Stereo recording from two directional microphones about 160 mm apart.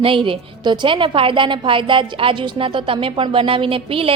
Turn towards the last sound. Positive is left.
turn(degrees=-35)  # may be behind; listen again after turning